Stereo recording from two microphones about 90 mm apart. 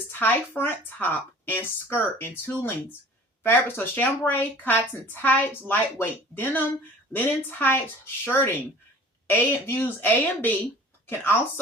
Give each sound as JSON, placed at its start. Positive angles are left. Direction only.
{"t": 0.1, "sound": "a woman's voice", "side_deg": 20}